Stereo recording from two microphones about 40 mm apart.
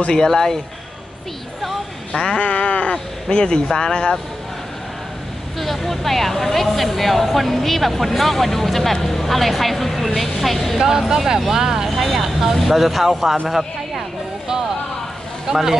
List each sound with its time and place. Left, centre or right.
0.1 s speech: centre
2.3 s sheep: left
2.9 s speech: left
5.6 s speech: centre
10.8 s speech: centre
15.4 s speech: centre